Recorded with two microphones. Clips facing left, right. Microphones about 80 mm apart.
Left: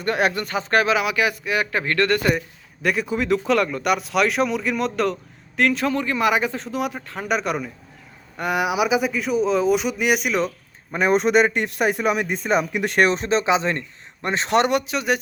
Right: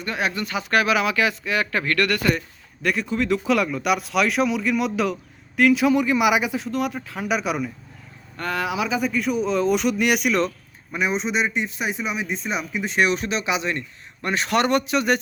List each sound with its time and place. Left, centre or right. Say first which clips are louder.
0.0 s speech: left 4 dB; left
0.9 s speech: even; centre
2.8 s speech: left 1 dB; centre
6.7 s speech: right 1 dB; centre
8.4 s speech: left 4 dB; centre
9.0 s speech: left 1 dB; centre
10.9 s speech: left 6 dB; left
12.6 s speech: left 3 dB; left
13.1 s speech: left 4 dB; left
14.7 s speech: right 1 dB; centre